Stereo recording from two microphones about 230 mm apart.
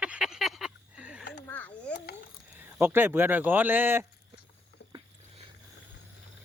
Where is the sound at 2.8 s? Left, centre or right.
Centre.